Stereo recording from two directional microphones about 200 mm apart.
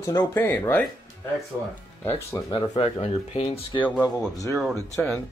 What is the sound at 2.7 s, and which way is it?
Speech, 30° left (ahead or behind).